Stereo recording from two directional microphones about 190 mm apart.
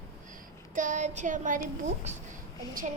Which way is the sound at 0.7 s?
40° right (ahead or behind).